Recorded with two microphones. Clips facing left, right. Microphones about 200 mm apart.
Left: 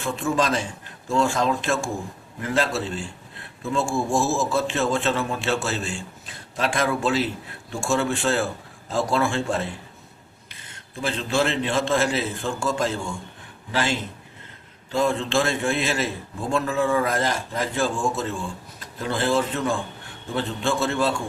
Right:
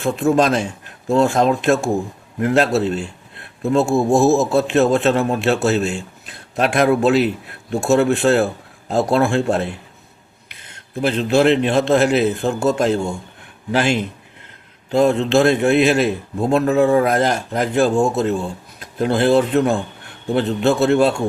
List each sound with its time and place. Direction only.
0.0 s a man's voice: 60° right (ahead or behind)